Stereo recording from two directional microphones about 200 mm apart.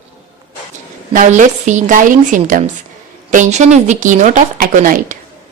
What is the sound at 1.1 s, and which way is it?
A woman's voice, 40° right (ahead or behind).